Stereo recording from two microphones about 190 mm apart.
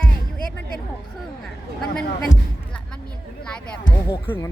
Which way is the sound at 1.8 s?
5° left (ahead or behind).